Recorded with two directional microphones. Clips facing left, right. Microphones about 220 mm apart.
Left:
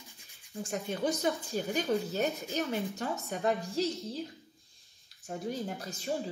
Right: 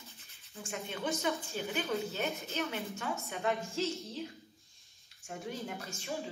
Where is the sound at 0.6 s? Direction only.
40° left (ahead or behind).